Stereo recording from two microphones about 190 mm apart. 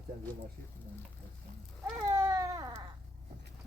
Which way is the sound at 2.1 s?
15° right (ahead or behind).